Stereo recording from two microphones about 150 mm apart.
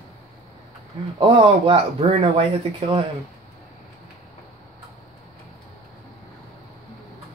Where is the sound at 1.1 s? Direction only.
35° right (ahead or behind).